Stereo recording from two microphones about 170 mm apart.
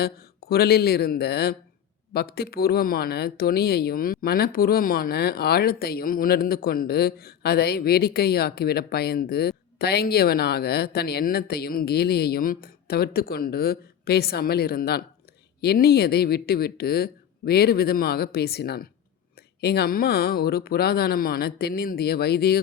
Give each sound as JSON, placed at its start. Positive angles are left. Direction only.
{"t": 0.0, "sound": "speech", "side_deg": 65}